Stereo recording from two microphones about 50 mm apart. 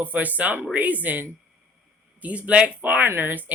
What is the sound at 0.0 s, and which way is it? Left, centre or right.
Speech, right.